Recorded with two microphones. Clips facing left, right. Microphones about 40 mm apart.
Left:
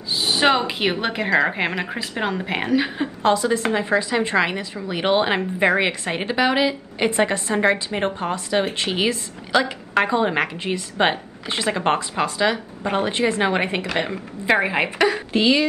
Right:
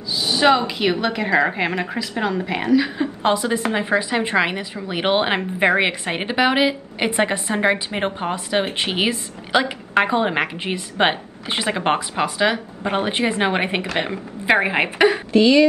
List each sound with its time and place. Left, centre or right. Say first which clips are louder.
0.1 s a sound: right 1 dB; left
0.6 s a woman's voice: right 2 dB; left
1.3 s a woman's voice: even; centre
2.0 s a woman's voice: right 2 dB; left
3.2 s a woman's voice: left 2 dB; right
15.3 s a woman's voice: right 5 dB; left